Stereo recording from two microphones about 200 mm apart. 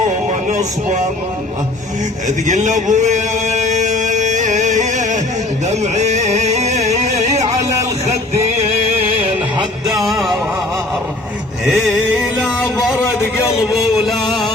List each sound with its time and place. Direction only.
0.3 s music: 35° right (ahead or behind)
2.2 s a sound: 40° right (ahead or behind)
5.6 s music: 35° right (ahead or behind)
9.8 s music: centre (ahead or behind)
11.6 s music: centre (ahead or behind)
13.7 s music: centre (ahead or behind)